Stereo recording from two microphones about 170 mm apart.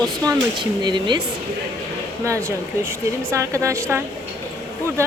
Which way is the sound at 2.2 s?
15° right (ahead or behind).